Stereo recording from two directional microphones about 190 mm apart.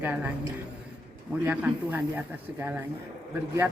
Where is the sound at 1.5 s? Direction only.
10° right (ahead or behind).